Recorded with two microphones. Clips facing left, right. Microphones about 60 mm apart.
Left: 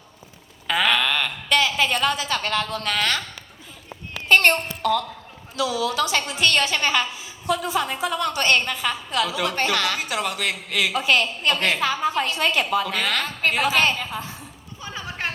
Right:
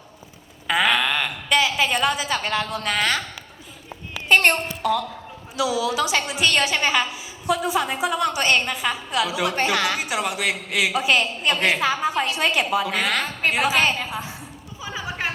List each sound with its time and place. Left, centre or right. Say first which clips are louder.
0.7 s a woman's voice: right 1 dB; centre
4.3 s a child's voice: even; centre
14.8 s a sound: right 2 dB; centre